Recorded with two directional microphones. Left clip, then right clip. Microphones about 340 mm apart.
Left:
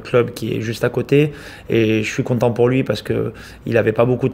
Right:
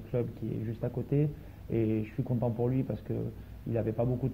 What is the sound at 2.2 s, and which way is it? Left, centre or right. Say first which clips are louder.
Speech: left 19 dB; left.